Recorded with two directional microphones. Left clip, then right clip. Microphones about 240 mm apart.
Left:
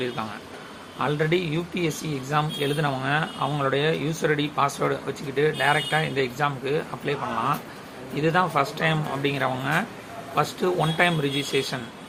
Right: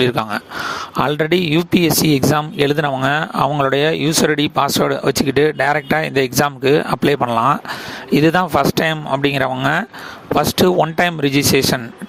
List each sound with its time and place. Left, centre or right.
0.9 s speech: right